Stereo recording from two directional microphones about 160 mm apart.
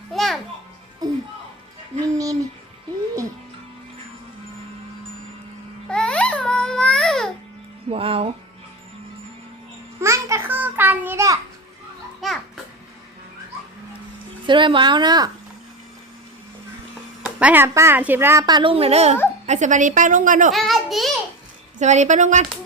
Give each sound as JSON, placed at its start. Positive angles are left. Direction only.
{"t": 0.1, "sound": "children playing", "side_deg": 0}
{"t": 2.1, "sound": "music", "side_deg": -20}
{"t": 5.9, "sound": "babbling", "side_deg": 5}
{"t": 7.9, "sound": "music", "side_deg": -35}
{"t": 10.0, "sound": "a sound", "side_deg": -20}
{"t": 12.2, "sound": "children playing", "side_deg": 0}
{"t": 14.4, "sound": "a woman's voice", "side_deg": -30}
{"t": 17.2, "sound": "a woman's voice", "side_deg": -10}
{"t": 20.5, "sound": "a sound", "side_deg": 0}
{"t": 21.8, "sound": "a woman's voice", "side_deg": -45}